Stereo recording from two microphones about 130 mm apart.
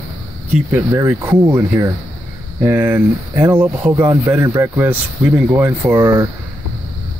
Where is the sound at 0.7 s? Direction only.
15° right (ahead or behind).